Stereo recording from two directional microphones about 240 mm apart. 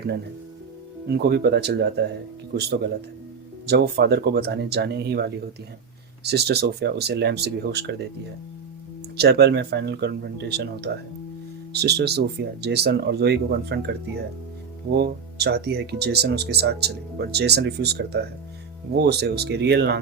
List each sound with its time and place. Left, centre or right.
1.1 s speech: right
9.1 s speech: right
14.9 s speech: right